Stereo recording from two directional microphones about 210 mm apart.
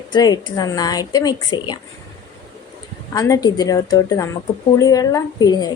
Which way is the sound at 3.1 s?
15° left (ahead or behind).